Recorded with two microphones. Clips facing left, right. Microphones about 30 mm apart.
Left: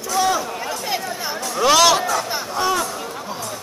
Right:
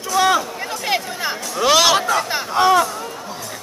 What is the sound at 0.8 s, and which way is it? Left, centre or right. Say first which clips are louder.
Chatter: right 7 dB; right.